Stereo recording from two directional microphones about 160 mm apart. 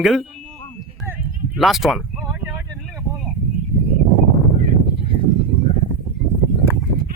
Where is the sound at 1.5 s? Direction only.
Centre (ahead or behind).